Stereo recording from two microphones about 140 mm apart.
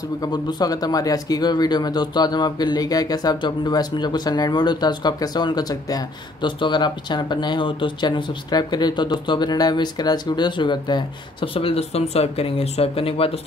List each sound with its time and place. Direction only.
0.2 s speech: 30° left (ahead or behind)